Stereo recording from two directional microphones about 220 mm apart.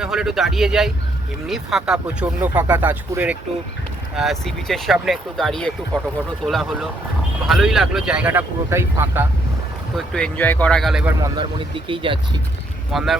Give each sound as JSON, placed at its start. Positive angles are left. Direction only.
{"t": 0.0, "sound": "speech", "side_deg": 0}
{"t": 9.9, "sound": "speech", "side_deg": 5}
{"t": 11.2, "sound": "speech", "side_deg": -20}
{"t": 12.9, "sound": "speech", "side_deg": 0}